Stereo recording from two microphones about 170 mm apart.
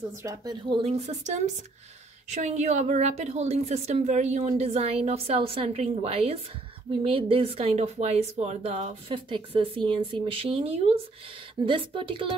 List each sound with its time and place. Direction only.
0.2 s speech: 20° right (ahead or behind)
0.8 s a woman's voice: 40° right (ahead or behind)